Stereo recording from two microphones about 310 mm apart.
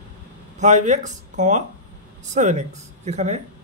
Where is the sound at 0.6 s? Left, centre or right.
Right.